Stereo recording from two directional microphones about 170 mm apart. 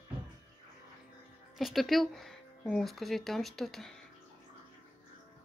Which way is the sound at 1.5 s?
Centre (ahead or behind).